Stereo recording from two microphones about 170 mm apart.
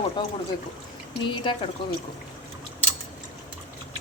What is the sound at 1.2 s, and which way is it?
Speech, 30° left (ahead or behind).